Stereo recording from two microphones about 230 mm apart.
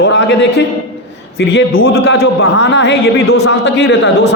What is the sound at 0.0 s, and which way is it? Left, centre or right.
A man's voice, left.